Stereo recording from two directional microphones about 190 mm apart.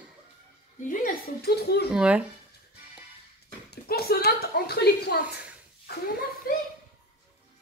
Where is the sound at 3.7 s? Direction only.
55° left (ahead or behind).